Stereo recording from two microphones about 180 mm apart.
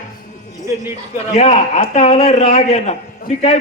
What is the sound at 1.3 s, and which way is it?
A man's voice, 40° left (ahead or behind).